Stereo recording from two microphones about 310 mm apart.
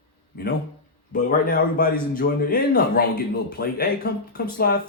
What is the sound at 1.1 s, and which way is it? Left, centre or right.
Speech, left.